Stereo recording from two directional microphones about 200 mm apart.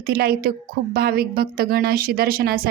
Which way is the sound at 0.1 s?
50° right (ahead or behind).